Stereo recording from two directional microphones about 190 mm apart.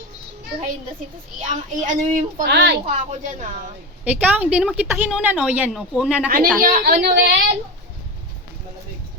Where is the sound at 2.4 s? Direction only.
65° right (ahead or behind).